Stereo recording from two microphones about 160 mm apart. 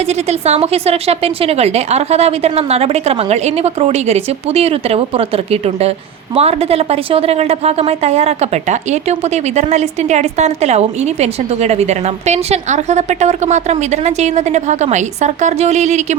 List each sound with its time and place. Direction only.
0.1 s a woman's voice: 45° right (ahead or behind)